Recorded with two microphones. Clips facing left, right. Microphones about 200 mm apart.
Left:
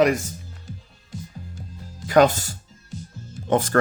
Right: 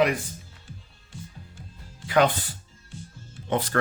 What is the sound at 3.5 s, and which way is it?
Speech, 45° left (ahead or behind).